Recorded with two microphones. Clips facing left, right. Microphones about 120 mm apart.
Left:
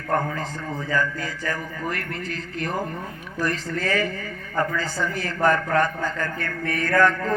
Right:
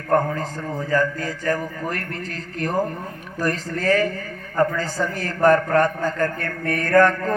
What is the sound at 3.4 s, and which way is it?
A man's voice, 40° right (ahead or behind).